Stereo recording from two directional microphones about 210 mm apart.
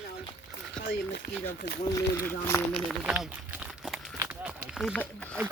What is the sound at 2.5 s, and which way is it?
Speech, 10° left (ahead or behind).